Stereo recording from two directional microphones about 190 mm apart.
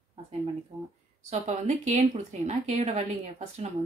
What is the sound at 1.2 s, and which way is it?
A woman's voice, 40° right (ahead or behind).